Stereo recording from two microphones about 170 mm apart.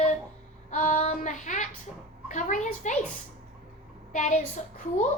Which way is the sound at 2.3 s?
45° left (ahead or behind).